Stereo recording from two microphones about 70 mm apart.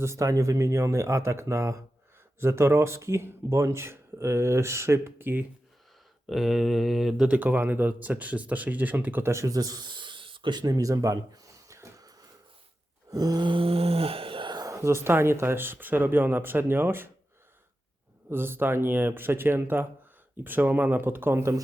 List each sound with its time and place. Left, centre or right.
0.0 s speech: right
6.2 s speech: centre
7.3 s speech: right
9.2 s speech: right
9.6 s speech: right
10.4 s a sound: right
13.1 s a sound: right
14.7 s speech: right
18.3 s speech: right